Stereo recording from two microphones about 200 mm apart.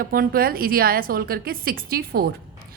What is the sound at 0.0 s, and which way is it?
A woman's voice, 45° right (ahead or behind).